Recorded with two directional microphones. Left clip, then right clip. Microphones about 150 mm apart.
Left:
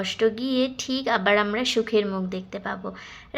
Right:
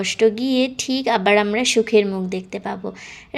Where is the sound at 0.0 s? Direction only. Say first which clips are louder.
Right 6 dB; 25° right (ahead or behind).